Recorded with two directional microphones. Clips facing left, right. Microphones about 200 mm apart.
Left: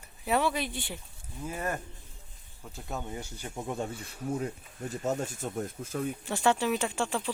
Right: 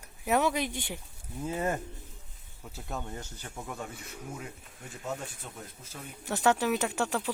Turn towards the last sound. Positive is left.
turn(degrees=-10)  # may be behind; listen again after turning